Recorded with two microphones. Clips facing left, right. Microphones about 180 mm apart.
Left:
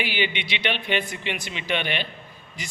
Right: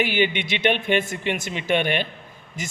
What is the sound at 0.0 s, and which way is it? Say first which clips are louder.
Speech: right 5 dB; 45° right (ahead or behind).